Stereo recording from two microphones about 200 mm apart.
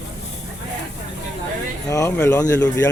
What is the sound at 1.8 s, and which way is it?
Speech, 15° left (ahead or behind).